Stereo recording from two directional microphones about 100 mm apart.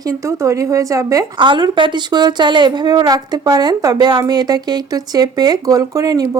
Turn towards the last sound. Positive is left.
turn(degrees=-40)  # may be behind; listen again after turning